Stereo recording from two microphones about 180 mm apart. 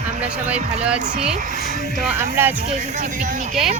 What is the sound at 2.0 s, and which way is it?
Speech, 10° right (ahead or behind).